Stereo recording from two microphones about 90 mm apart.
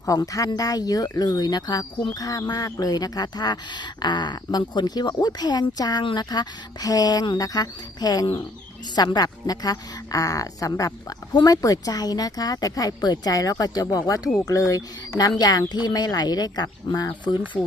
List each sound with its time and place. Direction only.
0.0 s a woman's voice: 40° left (ahead or behind)
17.5 s a woman's voice: 30° left (ahead or behind)